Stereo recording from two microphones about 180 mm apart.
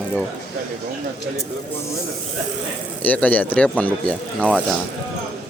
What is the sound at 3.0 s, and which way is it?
Speech, 10° left (ahead or behind).